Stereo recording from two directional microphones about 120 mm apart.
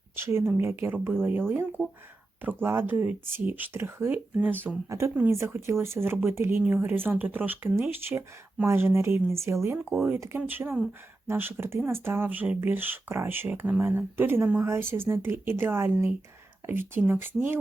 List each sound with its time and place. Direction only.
0.2 s speech: 20° right (ahead or behind)
9.7 s speech: 10° right (ahead or behind)
10.2 s speech: 20° right (ahead or behind)